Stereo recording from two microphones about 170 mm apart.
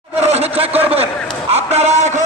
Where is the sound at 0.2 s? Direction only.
40° right (ahead or behind).